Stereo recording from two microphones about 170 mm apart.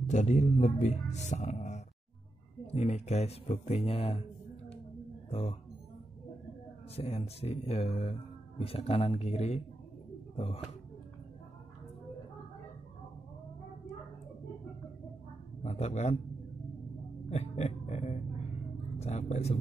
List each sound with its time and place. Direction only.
0.1 s speech: 45° left (ahead or behind)
5.3 s speech: 35° left (ahead or behind)
7.0 s speech: 35° left (ahead or behind)
15.6 s speech: 40° left (ahead or behind)
17.3 s a sound: 40° left (ahead or behind)
18.9 s speech: 40° left (ahead or behind)